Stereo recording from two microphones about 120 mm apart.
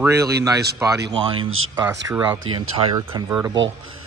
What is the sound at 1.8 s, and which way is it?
Speech, 25° right (ahead or behind).